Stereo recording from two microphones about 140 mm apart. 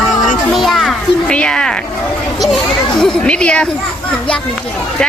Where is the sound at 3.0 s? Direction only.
5° left (ahead or behind).